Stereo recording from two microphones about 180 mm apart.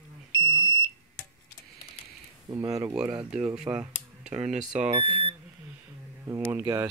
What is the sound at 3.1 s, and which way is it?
Speech, 5° right (ahead or behind).